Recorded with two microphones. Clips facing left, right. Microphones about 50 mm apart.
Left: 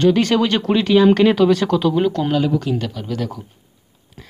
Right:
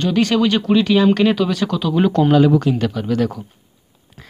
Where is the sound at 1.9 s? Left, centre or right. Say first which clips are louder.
Right 3 dB; centre.